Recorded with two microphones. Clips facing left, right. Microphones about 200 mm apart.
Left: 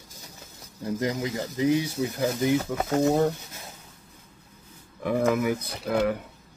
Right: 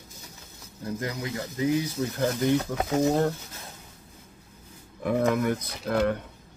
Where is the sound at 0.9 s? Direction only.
20° left (ahead or behind).